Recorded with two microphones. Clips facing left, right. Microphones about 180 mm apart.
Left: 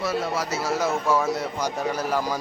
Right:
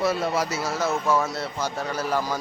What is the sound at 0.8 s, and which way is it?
Speech, 10° left (ahead or behind).